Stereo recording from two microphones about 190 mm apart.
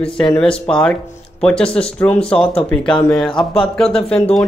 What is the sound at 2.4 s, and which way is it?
Speech, 30° left (ahead or behind).